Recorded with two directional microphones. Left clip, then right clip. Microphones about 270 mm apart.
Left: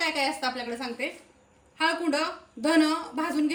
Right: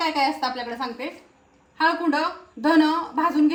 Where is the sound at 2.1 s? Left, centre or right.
Right.